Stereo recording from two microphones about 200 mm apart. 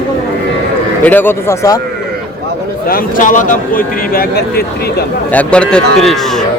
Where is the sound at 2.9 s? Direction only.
40° left (ahead or behind).